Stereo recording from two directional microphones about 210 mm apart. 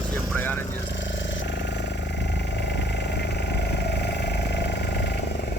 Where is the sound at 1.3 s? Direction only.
60° left (ahead or behind).